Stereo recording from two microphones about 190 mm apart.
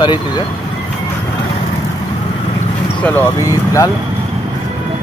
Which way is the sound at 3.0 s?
15° left (ahead or behind).